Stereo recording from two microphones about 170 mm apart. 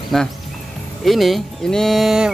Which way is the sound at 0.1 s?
Centre (ahead or behind).